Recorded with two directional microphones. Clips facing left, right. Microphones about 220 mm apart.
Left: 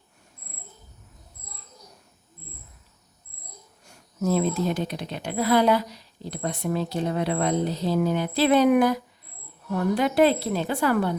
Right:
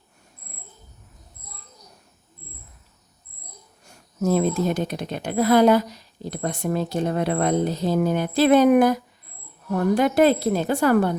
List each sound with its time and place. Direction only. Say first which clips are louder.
4.2 s speech: right 3 dB; 45° right (ahead or behind)